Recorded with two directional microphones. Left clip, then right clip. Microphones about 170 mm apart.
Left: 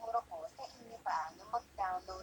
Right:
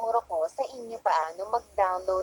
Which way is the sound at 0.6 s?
45° right (ahead or behind).